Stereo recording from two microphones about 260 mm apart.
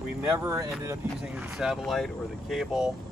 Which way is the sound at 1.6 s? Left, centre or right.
Centre.